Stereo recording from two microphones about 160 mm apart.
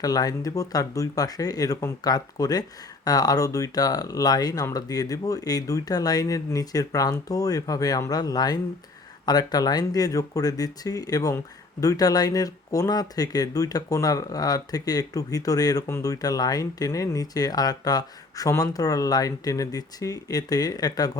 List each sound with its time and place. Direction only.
0.0 s speech: 25° left (ahead or behind)